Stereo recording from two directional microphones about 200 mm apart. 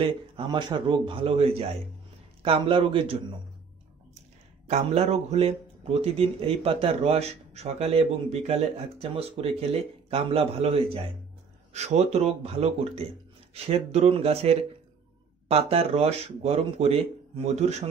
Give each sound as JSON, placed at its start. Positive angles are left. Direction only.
{"t": 0.0, "sound": "speech", "side_deg": -25}
{"t": 4.6, "sound": "speech", "side_deg": -35}